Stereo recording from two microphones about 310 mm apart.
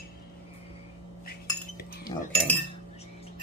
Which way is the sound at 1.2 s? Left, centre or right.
Left.